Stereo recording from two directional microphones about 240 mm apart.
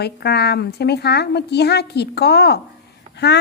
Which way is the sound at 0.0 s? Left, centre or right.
Left.